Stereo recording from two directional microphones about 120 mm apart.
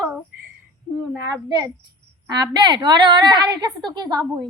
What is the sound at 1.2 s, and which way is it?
A woman's voice, 35° right (ahead or behind).